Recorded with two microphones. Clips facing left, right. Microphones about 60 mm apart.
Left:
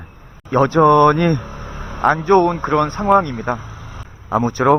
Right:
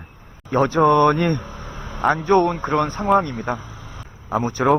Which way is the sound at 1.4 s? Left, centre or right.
Left.